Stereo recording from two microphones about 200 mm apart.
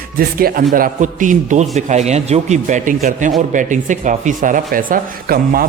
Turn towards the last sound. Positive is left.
turn(degrees=-45)  # may be behind; listen again after turning